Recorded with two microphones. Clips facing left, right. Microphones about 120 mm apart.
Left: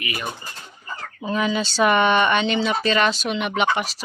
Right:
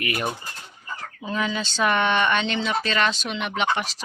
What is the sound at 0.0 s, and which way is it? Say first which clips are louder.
Speech: right 3 dB; 55° right (ahead or behind).